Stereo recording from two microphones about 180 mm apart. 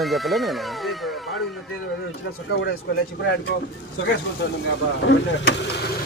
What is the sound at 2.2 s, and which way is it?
Speech, 70° left (ahead or behind).